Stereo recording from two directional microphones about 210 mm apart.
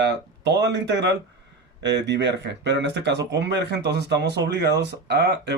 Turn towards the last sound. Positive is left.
turn(degrees=-55)  # may be behind; listen again after turning